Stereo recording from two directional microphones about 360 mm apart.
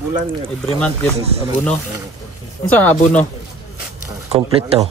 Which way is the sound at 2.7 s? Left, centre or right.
Centre.